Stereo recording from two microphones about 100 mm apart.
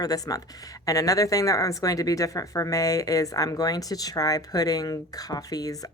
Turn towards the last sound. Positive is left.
turn(degrees=40)  # may be behind; listen again after turning